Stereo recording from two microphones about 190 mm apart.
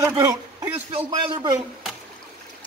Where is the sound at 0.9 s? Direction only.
25° right (ahead or behind).